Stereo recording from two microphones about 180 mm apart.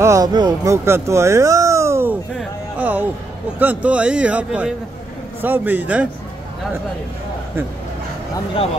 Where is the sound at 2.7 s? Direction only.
10° right (ahead or behind).